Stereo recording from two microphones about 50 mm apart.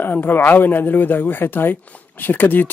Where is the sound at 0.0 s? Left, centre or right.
Left.